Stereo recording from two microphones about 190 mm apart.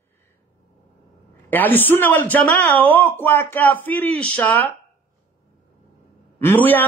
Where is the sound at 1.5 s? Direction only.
10° left (ahead or behind).